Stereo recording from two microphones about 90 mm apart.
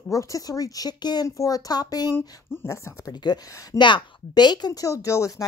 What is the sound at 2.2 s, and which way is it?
Speech, 30° left (ahead or behind).